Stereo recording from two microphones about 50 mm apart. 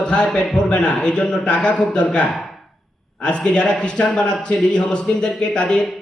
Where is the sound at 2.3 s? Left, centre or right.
Centre.